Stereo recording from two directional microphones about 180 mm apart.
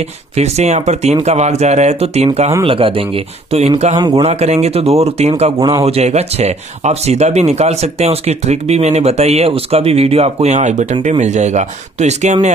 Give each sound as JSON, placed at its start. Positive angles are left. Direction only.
{"t": 0.4, "sound": "speech", "side_deg": -35}
{"t": 3.9, "sound": "a man's voice", "side_deg": -20}
{"t": 4.2, "sound": "speech", "side_deg": -35}
{"t": 5.6, "sound": "a man's voice", "side_deg": -20}
{"t": 5.9, "sound": "speech", "side_deg": -35}